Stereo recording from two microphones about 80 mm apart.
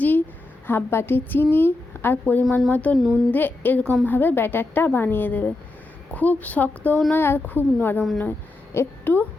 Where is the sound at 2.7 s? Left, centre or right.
Centre.